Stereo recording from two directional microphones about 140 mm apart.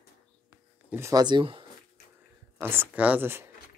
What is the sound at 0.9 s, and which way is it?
Speech, 20° right (ahead or behind).